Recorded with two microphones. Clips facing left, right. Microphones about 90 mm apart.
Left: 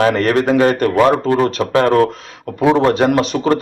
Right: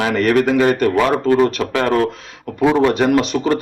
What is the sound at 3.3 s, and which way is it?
Speech, 40° left (ahead or behind).